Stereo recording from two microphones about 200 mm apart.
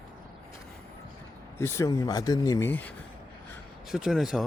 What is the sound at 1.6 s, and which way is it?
Speech, 15° left (ahead or behind).